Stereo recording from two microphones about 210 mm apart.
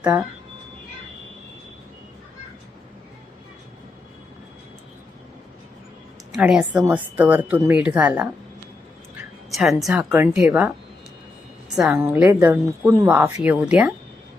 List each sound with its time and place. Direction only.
0.0 s speech: 5° right (ahead or behind)
6.3 s a woman's voice: 5° right (ahead or behind)
9.5 s speech: centre (ahead or behind)
11.8 s a woman's voice: 5° right (ahead or behind)